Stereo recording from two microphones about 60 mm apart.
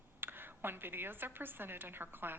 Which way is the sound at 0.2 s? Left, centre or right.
Right.